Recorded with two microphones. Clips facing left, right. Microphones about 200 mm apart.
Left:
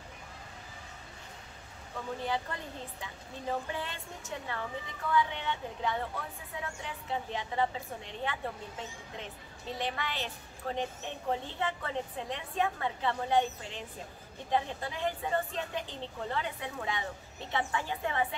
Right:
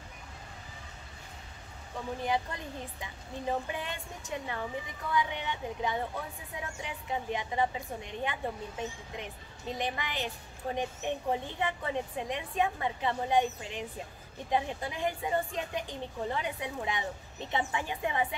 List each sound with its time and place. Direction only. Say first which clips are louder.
2.2 s a woman's voice: right 4 dB; 15° right (ahead or behind)